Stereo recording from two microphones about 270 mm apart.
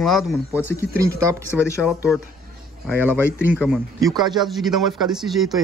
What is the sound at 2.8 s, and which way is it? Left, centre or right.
Speech, centre.